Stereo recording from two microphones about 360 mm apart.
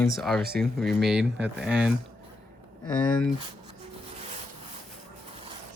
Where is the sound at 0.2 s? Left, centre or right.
Centre.